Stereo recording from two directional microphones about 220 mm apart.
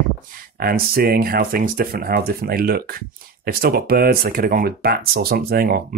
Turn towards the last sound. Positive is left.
turn(degrees=-45)  # may be behind; listen again after turning